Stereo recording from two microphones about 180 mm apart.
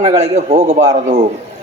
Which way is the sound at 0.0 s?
40° right (ahead or behind).